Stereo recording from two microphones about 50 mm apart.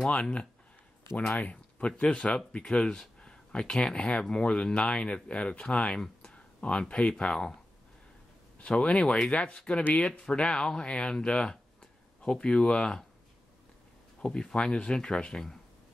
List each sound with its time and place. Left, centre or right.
0.0 s speech: left
8.5 s speech: left
14.2 s speech: centre